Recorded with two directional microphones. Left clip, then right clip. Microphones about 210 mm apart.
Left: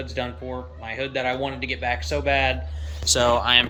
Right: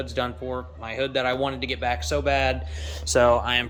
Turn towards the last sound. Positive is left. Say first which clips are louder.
# left 1 dB
turn(degrees=-15)  # may be behind; listen again after turning